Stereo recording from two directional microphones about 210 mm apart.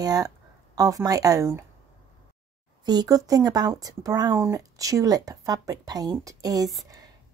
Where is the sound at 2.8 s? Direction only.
20° right (ahead or behind).